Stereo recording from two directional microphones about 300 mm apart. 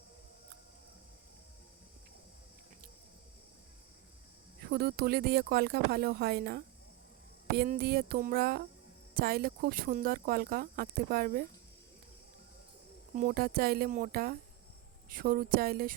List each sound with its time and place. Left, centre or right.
4.6 s speech: right
13.1 s speech: right